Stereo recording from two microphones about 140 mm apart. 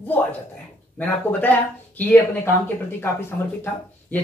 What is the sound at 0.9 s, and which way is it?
Speech, 10° left (ahead or behind).